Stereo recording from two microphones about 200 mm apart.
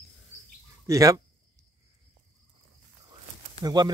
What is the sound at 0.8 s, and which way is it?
Speech, 15° right (ahead or behind).